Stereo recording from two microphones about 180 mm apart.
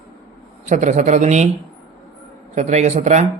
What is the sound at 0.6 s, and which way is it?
Speech, 40° right (ahead or behind).